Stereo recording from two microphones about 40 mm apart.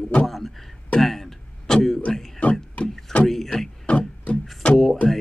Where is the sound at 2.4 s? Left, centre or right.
Left.